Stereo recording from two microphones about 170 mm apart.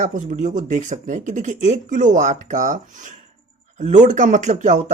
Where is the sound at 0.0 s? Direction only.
45° right (ahead or behind).